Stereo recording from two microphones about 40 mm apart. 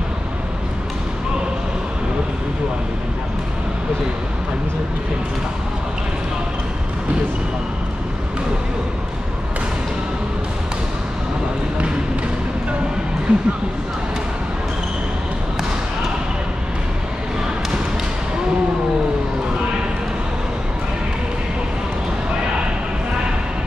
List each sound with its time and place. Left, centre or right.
13.3 s speech: right